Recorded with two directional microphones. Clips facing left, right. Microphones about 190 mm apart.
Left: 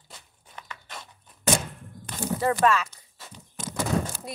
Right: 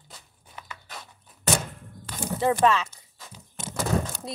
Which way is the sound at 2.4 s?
25° right (ahead or behind).